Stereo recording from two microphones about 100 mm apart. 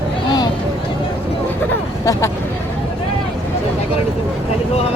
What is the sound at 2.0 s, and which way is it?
Speech, 30° left (ahead or behind).